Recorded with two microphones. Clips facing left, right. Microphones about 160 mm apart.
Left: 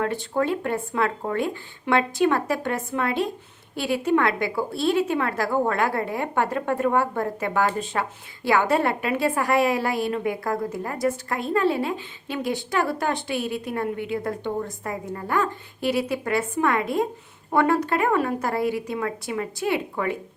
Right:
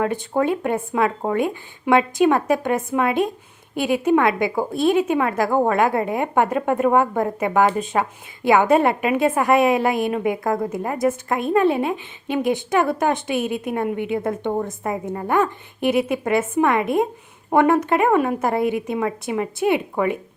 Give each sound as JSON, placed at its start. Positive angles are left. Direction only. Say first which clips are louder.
{"t": 0.0, "sound": "a woman's voice", "louder": "right 4 dB", "side_deg": -15}